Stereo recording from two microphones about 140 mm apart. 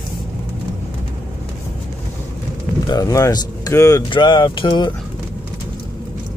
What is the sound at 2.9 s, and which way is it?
Speech, 25° left (ahead or behind).